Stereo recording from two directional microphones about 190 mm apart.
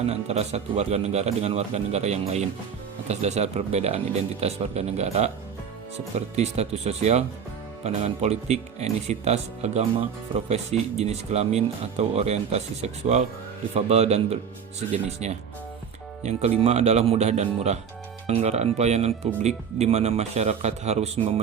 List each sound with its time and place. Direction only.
0.0 s speech: 35° right (ahead or behind)